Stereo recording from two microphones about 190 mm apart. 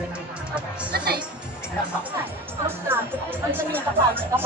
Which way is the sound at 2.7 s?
10° right (ahead or behind).